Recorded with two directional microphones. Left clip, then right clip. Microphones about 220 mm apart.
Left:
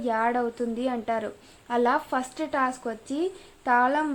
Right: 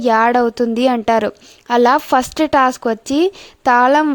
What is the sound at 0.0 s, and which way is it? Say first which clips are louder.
Speech: right 13 dB; 50° right (ahead or behind).